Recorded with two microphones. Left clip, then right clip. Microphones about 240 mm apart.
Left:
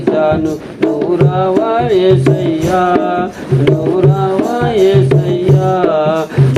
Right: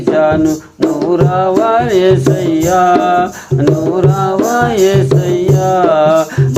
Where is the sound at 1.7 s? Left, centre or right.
Right.